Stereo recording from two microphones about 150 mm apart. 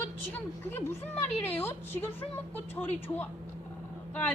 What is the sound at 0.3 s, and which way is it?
A woman's voice, 15° left (ahead or behind).